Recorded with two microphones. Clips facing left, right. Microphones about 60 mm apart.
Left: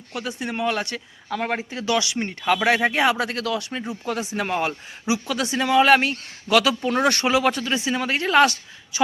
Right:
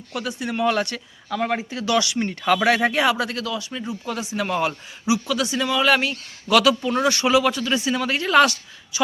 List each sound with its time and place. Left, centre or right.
0.1 s speech: left
0.6 s speech: centre
0.9 s speech: left
3.1 s speech: left
3.4 s speech: left
4.4 s speech: left
6.5 s speech: left
6.8 s speech: left
7.3 s speech: left